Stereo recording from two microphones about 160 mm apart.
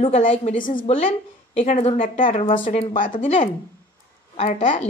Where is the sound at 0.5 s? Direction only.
55° left (ahead or behind).